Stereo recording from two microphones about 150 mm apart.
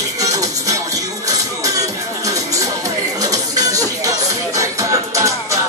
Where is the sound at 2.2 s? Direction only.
20° right (ahead or behind).